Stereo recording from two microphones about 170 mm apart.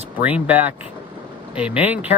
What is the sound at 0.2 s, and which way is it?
Speech, 10° right (ahead or behind).